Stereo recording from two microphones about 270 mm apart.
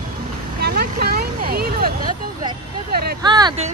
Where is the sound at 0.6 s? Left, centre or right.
Right.